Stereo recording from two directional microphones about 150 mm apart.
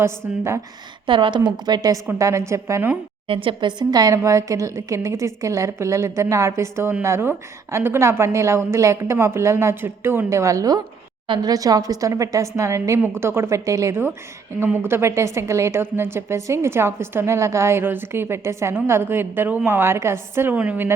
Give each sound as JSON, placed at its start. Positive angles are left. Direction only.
{"t": 0.0, "sound": "a woman's voice", "side_deg": -15}
{"t": 1.0, "sound": "a woman's voice", "side_deg": -35}
{"t": 3.2, "sound": "a woman's voice", "side_deg": -35}